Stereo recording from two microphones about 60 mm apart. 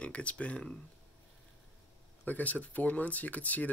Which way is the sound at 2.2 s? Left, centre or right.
Left.